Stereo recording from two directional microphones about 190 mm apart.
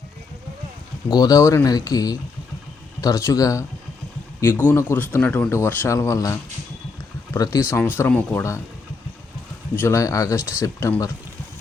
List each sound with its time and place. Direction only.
1.1 s speech: 20° left (ahead or behind)
9.7 s speech: 15° left (ahead or behind)